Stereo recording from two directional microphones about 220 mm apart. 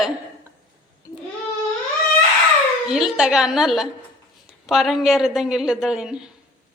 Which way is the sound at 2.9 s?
Centre (ahead or behind).